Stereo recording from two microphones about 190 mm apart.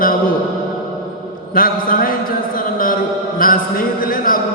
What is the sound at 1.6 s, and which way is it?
Speech, 50° left (ahead or behind).